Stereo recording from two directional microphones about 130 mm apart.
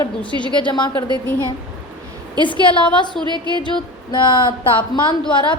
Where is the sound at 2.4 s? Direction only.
40° left (ahead or behind).